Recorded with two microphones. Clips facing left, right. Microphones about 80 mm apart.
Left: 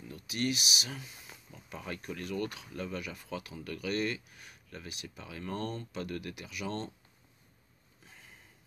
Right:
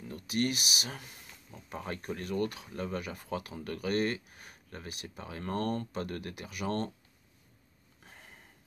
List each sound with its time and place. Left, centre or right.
0.1 s speech: right
1.5 s speech: right
8.0 s sniff: right